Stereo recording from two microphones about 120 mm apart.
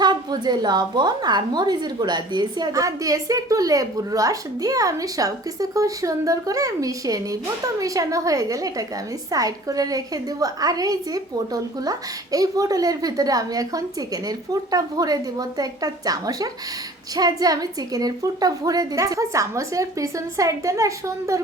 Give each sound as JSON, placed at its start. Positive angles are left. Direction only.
{"t": 0.0, "sound": "a woman's voice", "side_deg": -35}